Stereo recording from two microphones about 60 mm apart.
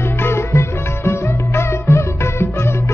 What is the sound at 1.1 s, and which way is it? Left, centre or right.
Music, left.